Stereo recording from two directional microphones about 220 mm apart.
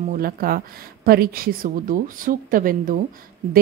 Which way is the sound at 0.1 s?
40° right (ahead or behind).